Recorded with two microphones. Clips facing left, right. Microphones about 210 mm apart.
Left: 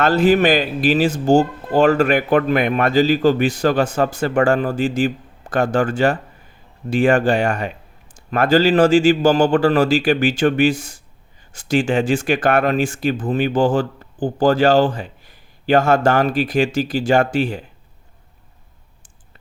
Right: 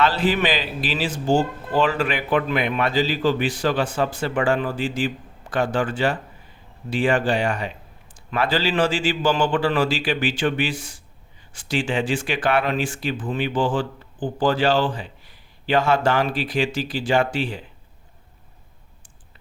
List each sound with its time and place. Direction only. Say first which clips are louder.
0.0 s speech: left 6 dB; 45° left (ahead or behind)